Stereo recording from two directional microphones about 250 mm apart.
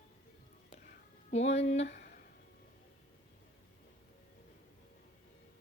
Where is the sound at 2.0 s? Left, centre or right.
Left.